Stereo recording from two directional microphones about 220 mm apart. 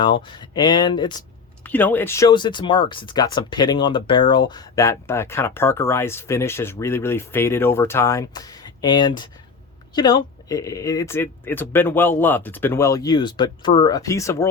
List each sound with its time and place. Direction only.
0.0 s speech: 20° left (ahead or behind)
1.6 s speech: 10° left (ahead or behind)